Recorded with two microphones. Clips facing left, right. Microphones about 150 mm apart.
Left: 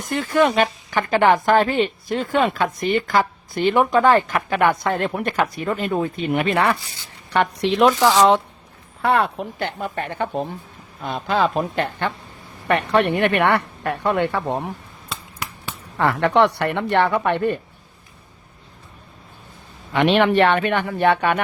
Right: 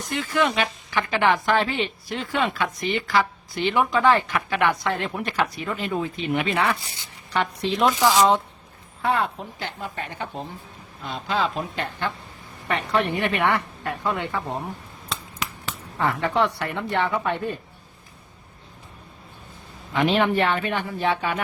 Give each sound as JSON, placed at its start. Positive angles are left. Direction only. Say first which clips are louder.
{"t": 0.0, "sound": "speech", "louder": "left 5 dB", "side_deg": 50}
{"t": 7.3, "sound": "speech", "louder": "left 5 dB", "side_deg": 65}
{"t": 9.0, "sound": "speech", "louder": "left 5 dB", "side_deg": 70}
{"t": 16.2, "sound": "speech", "louder": "left 8 dB", "side_deg": 75}
{"t": 19.9, "sound": "speech", "louder": "left 4 dB", "side_deg": 75}